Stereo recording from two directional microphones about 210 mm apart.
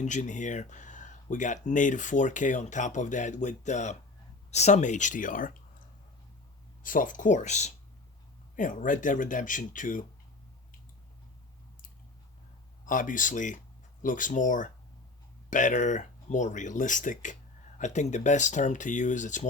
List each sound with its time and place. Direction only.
0.0 s speech: 35° left (ahead or behind)
6.8 s speech: 40° left (ahead or behind)
12.8 s speech: 40° left (ahead or behind)